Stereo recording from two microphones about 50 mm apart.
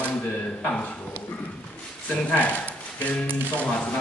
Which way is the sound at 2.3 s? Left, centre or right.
Left.